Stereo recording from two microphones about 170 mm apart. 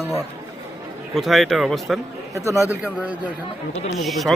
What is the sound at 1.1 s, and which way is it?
Speech, centre (ahead or behind).